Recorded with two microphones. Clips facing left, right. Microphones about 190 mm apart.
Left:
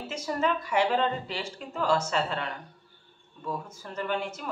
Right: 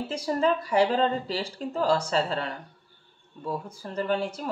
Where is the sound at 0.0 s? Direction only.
35° right (ahead or behind).